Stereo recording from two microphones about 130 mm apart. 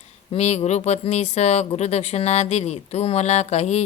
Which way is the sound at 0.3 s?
55° left (ahead or behind).